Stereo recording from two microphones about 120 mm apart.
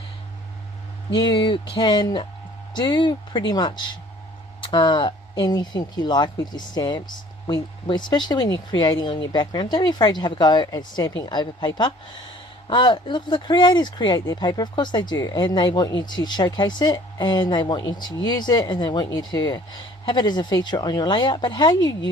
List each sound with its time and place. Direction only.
1.1 s speech: 40° left (ahead or behind)